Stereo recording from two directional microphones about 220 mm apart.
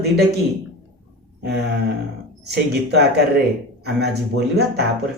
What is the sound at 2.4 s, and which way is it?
Mantra, 50° right (ahead or behind).